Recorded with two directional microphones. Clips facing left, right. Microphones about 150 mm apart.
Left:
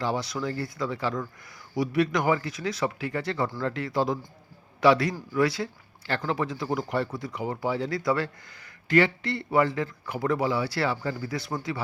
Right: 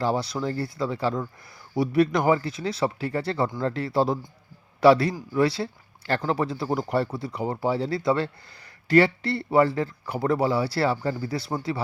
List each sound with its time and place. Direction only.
0.0 s speech: 35° right (ahead or behind)